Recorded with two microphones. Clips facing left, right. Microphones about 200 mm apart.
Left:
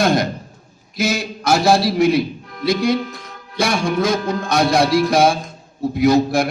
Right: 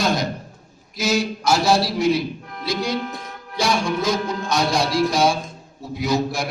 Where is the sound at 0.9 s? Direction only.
55° left (ahead or behind).